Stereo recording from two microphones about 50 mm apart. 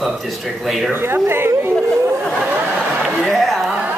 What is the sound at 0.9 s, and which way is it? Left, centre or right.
Speech, right.